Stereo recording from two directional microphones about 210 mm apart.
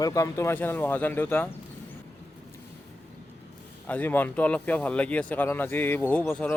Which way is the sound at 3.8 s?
10° left (ahead or behind).